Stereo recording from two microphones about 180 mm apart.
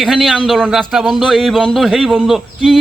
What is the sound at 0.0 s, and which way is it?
Speech, centre (ahead or behind).